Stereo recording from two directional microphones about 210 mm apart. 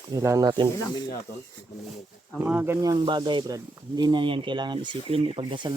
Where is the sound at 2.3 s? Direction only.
10° right (ahead or behind).